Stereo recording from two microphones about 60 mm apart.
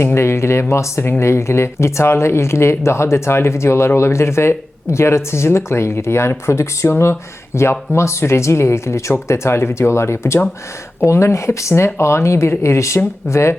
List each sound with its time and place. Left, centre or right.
0.0 s speech: left